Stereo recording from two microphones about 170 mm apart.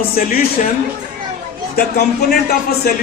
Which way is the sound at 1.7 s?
65° left (ahead or behind).